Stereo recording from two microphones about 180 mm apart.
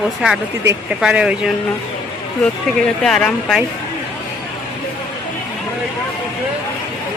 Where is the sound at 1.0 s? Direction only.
5° right (ahead or behind).